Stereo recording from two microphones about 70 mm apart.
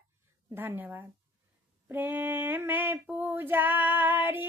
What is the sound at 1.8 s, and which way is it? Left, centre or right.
Female singing, right.